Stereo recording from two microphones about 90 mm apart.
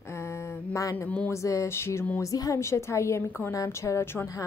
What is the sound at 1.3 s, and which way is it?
Speech, 35° left (ahead or behind).